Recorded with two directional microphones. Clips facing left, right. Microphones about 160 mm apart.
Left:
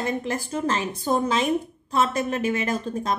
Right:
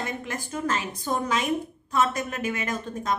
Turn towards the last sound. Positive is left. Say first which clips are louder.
# left 3 dB
turn(degrees=30)  # may be behind; listen again after turning